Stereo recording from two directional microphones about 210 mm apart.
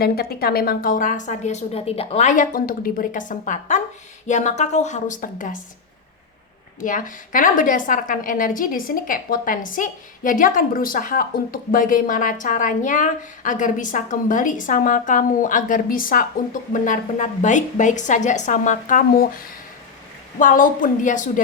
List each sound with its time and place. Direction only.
0.0 s a woman's voice: 45° left (ahead or behind)
6.7 s a woman's voice: 40° left (ahead or behind)